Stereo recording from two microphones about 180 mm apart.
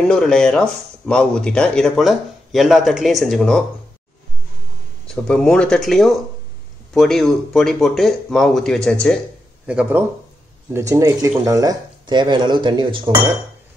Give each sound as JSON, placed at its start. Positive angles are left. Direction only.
{"t": 0.1, "sound": "speech", "side_deg": 5}
{"t": 5.0, "sound": "speech", "side_deg": 5}
{"t": 9.7, "sound": "speech", "side_deg": -5}